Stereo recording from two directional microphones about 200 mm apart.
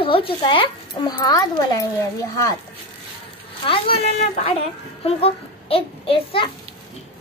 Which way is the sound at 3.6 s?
25° left (ahead or behind).